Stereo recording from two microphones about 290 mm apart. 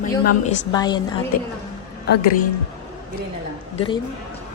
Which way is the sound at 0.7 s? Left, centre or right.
Centre.